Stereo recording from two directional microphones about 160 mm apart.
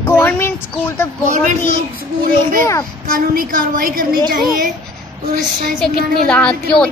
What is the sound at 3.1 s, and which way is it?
A woman's voice, 65° right (ahead or behind).